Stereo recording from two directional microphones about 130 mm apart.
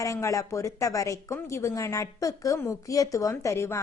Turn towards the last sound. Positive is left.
turn(degrees=20)  # may be behind; listen again after turning